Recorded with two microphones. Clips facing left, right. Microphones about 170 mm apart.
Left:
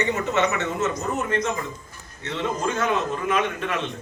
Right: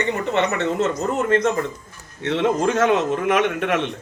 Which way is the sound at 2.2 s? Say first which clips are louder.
Right 7 dB; 70° right (ahead or behind).